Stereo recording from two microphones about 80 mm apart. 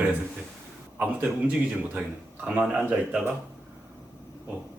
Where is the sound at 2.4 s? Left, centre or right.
Centre.